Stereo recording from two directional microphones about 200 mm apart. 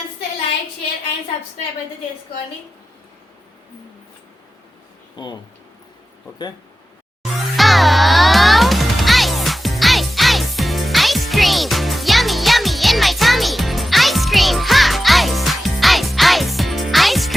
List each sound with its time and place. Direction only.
5.1 s speech: 20° left (ahead or behind)
7.3 s music: centre (ahead or behind)